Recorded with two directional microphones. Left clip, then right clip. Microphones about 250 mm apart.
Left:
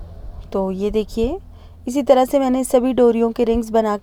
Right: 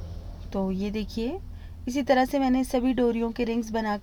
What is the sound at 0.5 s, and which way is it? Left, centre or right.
A woman's voice, left.